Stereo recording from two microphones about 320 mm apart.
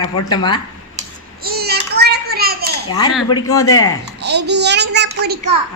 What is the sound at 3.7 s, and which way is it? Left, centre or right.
Speech, left.